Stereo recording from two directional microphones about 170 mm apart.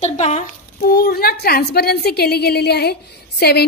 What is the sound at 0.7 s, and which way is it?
A woman's voice, 60° left (ahead or behind).